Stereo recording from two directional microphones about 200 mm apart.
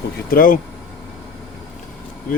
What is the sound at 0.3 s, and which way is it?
Speech, 45° left (ahead or behind).